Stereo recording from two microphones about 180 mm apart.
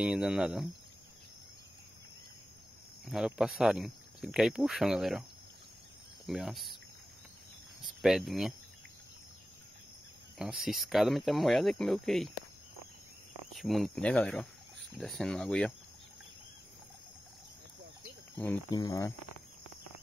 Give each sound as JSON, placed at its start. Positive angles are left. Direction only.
{"t": 0.0, "sound": "speech", "side_deg": -5}
{"t": 3.1, "sound": "speech", "side_deg": -5}
{"t": 6.2, "sound": "speech", "side_deg": 0}
{"t": 7.8, "sound": "speech", "side_deg": 0}
{"t": 10.3, "sound": "speech", "side_deg": 0}
{"t": 13.5, "sound": "speech", "side_deg": 0}
{"t": 18.7, "sound": "speech", "side_deg": 20}